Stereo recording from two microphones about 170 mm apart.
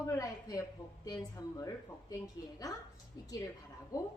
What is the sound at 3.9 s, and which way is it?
Speech, 20° left (ahead or behind).